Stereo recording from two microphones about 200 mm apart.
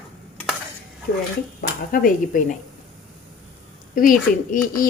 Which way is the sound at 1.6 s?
45° left (ahead or behind).